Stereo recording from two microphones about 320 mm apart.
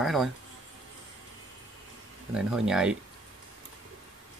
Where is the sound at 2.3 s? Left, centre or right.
Centre.